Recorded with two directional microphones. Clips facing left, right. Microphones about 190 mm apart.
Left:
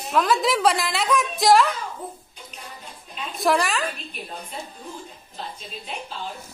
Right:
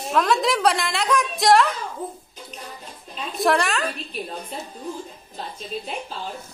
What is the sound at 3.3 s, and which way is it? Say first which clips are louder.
Speech: right 1 dB; centre (ahead or behind).